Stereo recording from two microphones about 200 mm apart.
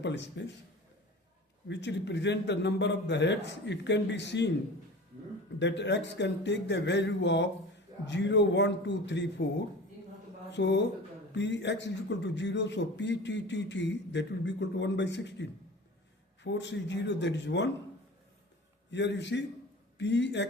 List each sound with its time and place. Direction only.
0.0 s a man's voice: 60° left (ahead or behind)
1.6 s a man's voice: 60° left (ahead or behind)
5.5 s a man's voice: 60° left (ahead or behind)
10.5 s a man's voice: 60° left (ahead or behind)
18.9 s a man's voice: 60° left (ahead or behind)